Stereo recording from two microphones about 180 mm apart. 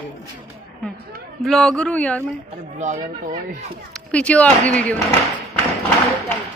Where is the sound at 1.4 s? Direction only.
Centre (ahead or behind).